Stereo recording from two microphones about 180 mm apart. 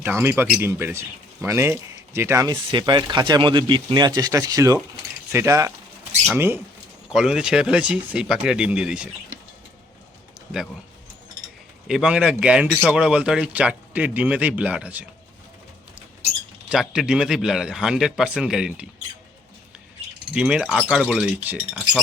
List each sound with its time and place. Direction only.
0.2 s a man's voice: 15° right (ahead or behind)
11.9 s speech: 5° right (ahead or behind)
16.6 s a man's voice: 5° right (ahead or behind)
20.3 s a man's voice: 5° right (ahead or behind)